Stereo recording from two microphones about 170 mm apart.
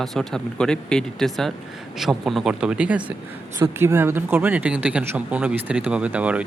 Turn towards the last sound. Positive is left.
turn(degrees=-10)  # may be behind; listen again after turning